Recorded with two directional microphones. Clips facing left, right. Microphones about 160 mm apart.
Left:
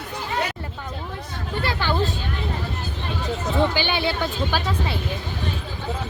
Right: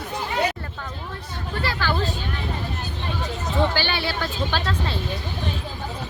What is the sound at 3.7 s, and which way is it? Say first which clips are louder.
Speech: left 2 dB; 15° left (ahead or behind).